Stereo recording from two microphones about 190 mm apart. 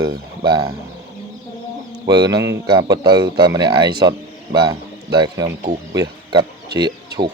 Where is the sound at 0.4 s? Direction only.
25° right (ahead or behind).